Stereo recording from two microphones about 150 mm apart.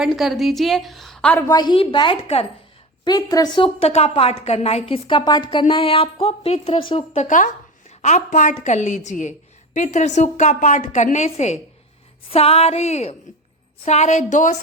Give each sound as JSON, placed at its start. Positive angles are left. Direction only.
{"t": 0.0, "sound": "a woman's voice", "side_deg": 0}
{"t": 1.5, "sound": "a woman's voice", "side_deg": 30}
{"t": 3.0, "sound": "a woman's voice", "side_deg": 25}